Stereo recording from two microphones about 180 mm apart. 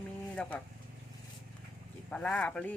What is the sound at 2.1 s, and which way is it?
Speech, 5° left (ahead or behind).